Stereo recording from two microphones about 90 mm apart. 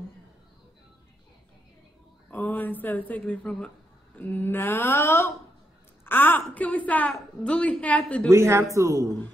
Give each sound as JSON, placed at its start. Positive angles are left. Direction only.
{"t": 2.3, "sound": "speech", "side_deg": 20}
{"t": 6.0, "sound": "a sound", "side_deg": 25}
{"t": 6.5, "sound": "a woman's voice", "side_deg": 15}
{"t": 8.3, "sound": "speech", "side_deg": -30}